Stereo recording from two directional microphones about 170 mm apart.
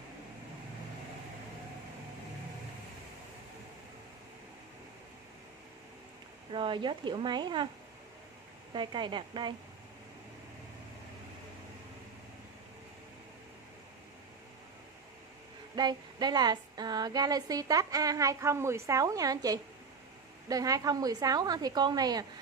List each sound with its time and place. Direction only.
6.5 s speech: 30° right (ahead or behind)
8.7 s speech: 25° right (ahead or behind)
15.7 s speech: 25° right (ahead or behind)